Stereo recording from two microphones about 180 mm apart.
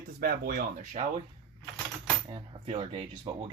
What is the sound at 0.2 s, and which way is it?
Speech, 60° right (ahead or behind).